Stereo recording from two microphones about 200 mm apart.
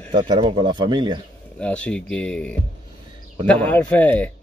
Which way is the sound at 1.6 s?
5° left (ahead or behind).